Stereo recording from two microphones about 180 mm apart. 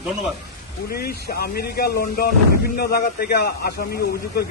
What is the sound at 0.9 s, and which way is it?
Speech, 60° left (ahead or behind).